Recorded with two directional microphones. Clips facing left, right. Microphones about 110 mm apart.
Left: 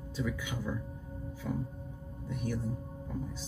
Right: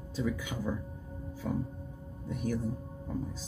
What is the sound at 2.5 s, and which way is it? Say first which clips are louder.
Speech: right 3 dB; 40° right (ahead or behind).